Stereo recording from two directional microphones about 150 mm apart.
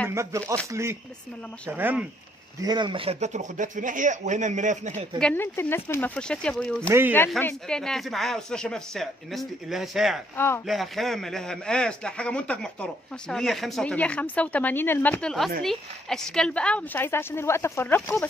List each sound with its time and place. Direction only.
0.1 s speech: 20° right (ahead or behind)
2.6 s speech: 30° right (ahead or behind); by 5.0 s 55° right (ahead or behind)
5.2 s a woman's voice: 15° left (ahead or behind)
6.9 s speech: 15° right (ahead or behind)
7.4 s a man's voice: 5° left (ahead or behind)
10.3 s a woman's voice: 15° left (ahead or behind)
10.7 s a man's voice: centre (ahead or behind)